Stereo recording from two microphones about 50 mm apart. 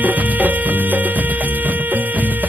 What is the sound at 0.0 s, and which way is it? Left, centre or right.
Music, right.